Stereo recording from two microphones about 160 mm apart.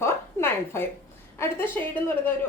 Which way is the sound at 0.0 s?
15° left (ahead or behind).